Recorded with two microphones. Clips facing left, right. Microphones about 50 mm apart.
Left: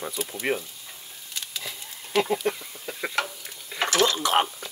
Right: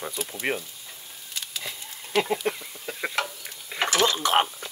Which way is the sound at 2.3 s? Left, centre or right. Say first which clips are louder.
Left 1 dB; centre.